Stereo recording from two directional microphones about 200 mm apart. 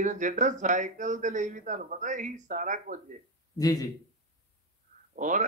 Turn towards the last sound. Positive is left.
turn(degrees=-40)  # may be behind; listen again after turning